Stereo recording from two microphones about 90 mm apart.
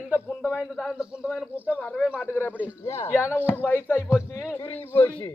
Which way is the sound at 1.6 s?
20° left (ahead or behind).